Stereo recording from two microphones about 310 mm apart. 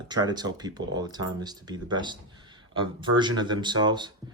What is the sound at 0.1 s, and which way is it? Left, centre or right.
Speech, centre.